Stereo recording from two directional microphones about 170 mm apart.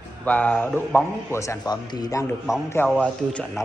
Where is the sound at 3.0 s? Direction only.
5° left (ahead or behind).